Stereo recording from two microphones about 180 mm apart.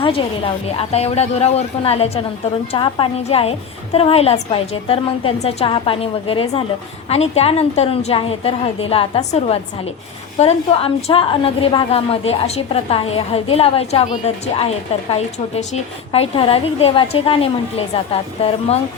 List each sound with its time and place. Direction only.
0.0 s a woman's voice: 30° left (ahead or behind)